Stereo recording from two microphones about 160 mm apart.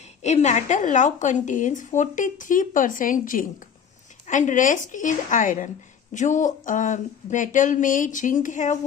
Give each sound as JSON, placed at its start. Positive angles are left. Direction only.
{"t": 0.2, "sound": "a woman's voice", "side_deg": 45}